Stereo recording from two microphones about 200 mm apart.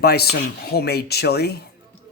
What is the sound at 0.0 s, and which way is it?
Speech, 50° left (ahead or behind).